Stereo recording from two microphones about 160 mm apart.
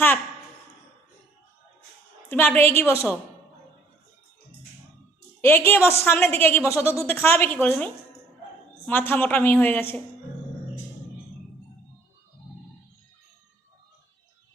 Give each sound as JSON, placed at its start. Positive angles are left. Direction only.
{"t": 2.3, "sound": "a woman's voice", "side_deg": 10}
{"t": 5.4, "sound": "a woman's voice", "side_deg": 15}
{"t": 8.9, "sound": "a woman's voice", "side_deg": 10}